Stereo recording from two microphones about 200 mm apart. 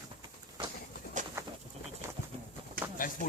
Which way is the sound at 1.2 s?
40° right (ahead or behind).